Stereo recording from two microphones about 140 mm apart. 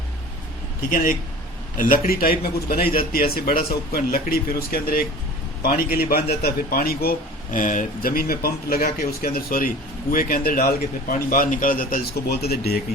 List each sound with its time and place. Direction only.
0.9 s a man's voice: 80° left